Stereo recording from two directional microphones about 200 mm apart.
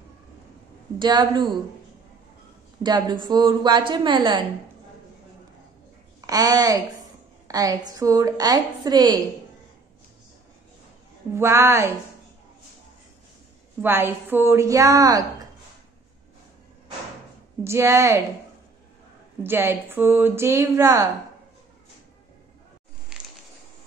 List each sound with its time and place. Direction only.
0.9 s a woman's voice: 20° right (ahead or behind)
2.8 s a woman's voice: 20° right (ahead or behind)
6.2 s a woman's voice: 20° right (ahead or behind)
11.3 s speech: 15° right (ahead or behind)
13.7 s speech: 10° right (ahead or behind)
17.6 s speech: 15° right (ahead or behind)
19.4 s speech: 10° right (ahead or behind)
23.1 s a sound: 5° right (ahead or behind)